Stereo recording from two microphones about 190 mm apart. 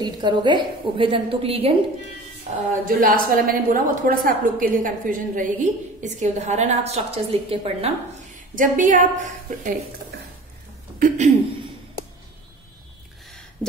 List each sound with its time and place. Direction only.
0.0 s a woman's voice: 25° right (ahead or behind)
2.8 s a woman's voice: 45° right (ahead or behind)
8.5 s a woman's voice: 45° right (ahead or behind)
11.0 s speech: 40° right (ahead or behind)